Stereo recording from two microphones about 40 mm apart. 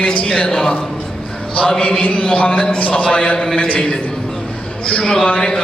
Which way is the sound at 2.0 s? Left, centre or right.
Left.